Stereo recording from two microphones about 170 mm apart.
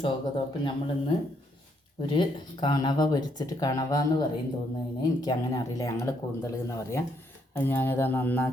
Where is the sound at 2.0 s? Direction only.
25° left (ahead or behind).